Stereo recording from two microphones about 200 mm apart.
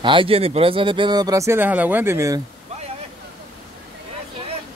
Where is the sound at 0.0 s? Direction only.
25° right (ahead or behind).